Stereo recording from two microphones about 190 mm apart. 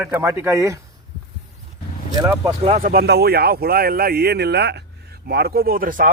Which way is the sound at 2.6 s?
35° right (ahead or behind).